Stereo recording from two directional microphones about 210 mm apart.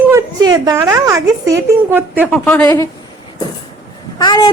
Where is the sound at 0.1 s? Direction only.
15° right (ahead or behind).